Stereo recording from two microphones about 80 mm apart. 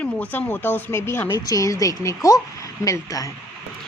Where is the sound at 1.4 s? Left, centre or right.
Left.